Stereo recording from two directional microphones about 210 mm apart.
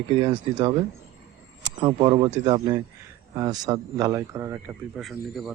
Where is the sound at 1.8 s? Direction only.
20° right (ahead or behind).